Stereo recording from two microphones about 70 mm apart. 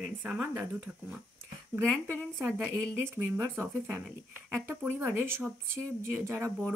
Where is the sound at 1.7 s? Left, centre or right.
Right.